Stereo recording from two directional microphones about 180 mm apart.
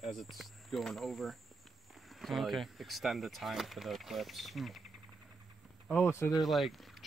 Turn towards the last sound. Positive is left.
turn(degrees=0)  # may be behind; listen again after turning